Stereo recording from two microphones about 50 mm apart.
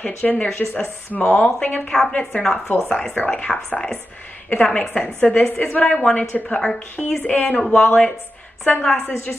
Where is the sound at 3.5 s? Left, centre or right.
Centre.